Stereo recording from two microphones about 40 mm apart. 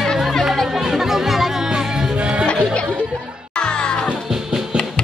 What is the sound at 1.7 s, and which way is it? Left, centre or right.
Music, centre.